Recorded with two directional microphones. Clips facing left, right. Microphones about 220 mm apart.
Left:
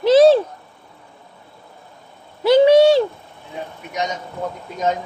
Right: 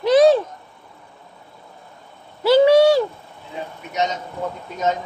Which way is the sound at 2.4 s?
20° left (ahead or behind).